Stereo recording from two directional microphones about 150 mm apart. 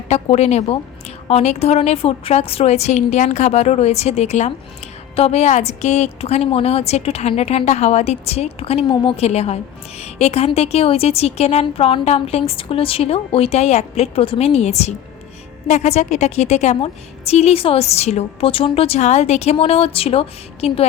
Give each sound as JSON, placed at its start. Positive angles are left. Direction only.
{"t": 0.1, "sound": "a woman's voice", "side_deg": 45}